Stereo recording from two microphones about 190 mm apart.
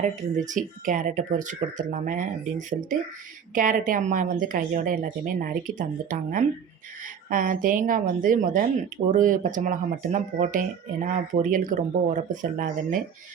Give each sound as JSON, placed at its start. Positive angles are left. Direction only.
{"t": 0.3, "sound": "a woman's voice", "side_deg": -40}